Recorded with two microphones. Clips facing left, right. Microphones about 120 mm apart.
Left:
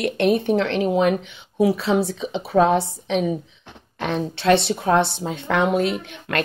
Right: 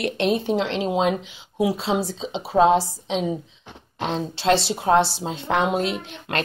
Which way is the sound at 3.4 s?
60° left (ahead or behind).